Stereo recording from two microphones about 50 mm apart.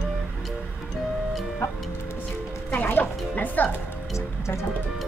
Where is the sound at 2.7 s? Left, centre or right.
Left.